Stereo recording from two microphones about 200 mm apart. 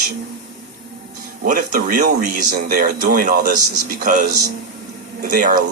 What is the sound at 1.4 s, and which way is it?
Speech, 40° right (ahead or behind).